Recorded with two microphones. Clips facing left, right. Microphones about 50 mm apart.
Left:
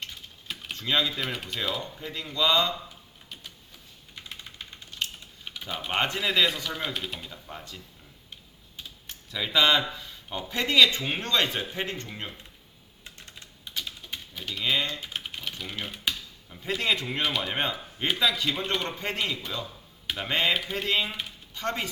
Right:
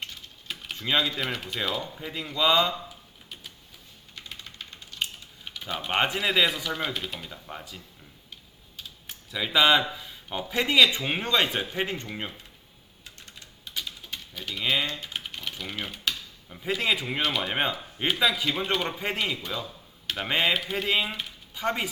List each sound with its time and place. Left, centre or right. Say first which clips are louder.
0.8 s speech: right 1 dB; centre
4.1 s typewriter: even; centre
5.5 s speech: right 2 dB; centre
9.0 s speech: right 1 dB; centre
13.1 s typing: left 1 dB; centre
14.5 s speech: right 1 dB; centre
20.5 s speech: right 1 dB; centre